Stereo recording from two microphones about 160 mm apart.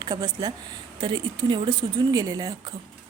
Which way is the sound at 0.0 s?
25° right (ahead or behind).